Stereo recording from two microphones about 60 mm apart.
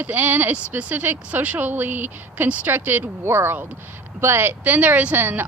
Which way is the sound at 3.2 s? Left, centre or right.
Right.